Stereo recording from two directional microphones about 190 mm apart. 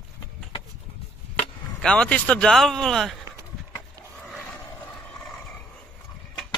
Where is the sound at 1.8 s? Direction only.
5° left (ahead or behind).